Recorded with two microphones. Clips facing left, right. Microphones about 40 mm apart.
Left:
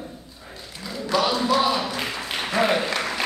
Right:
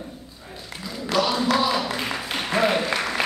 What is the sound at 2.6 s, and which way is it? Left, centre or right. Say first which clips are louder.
Speech: left 1 dB; centre.